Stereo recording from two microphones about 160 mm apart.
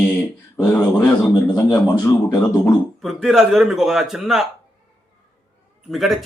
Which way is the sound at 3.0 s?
Centre (ahead or behind).